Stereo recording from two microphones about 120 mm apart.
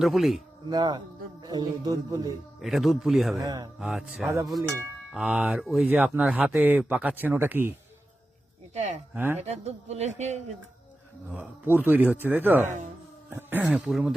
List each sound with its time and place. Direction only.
0.0 s a man's voice: centre (ahead or behind)
0.7 s a man's voice: 40° right (ahead or behind)
2.6 s a man's voice: centre (ahead or behind)
3.4 s a man's voice: 35° right (ahead or behind)
3.8 s a man's voice: 5° right (ahead or behind)
8.7 s speech: 75° right (ahead or behind)
9.1 s speech: 15° right (ahead or behind)
9.4 s speech: 65° right (ahead or behind)
11.3 s speech: 15° right (ahead or behind)
13.7 s a man's voice: 5° right (ahead or behind)